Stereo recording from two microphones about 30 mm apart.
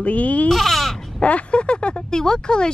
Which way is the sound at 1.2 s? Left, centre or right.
Left.